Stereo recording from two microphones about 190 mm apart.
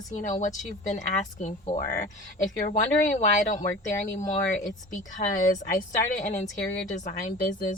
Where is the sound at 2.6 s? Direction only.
40° left (ahead or behind).